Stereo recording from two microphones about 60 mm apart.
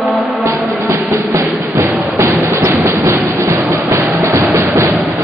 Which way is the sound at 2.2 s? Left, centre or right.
Right.